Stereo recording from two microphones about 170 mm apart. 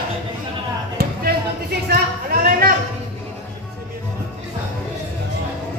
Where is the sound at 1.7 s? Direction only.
65° right (ahead or behind).